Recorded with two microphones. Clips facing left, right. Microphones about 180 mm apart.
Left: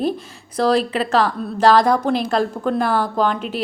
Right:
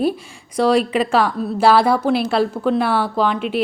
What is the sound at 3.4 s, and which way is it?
Speech, 40° left (ahead or behind).